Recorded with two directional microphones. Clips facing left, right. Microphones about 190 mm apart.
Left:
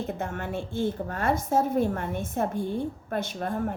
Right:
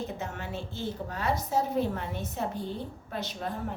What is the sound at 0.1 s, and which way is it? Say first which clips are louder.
A woman's voice: left 5 dB; 55° left (ahead or behind).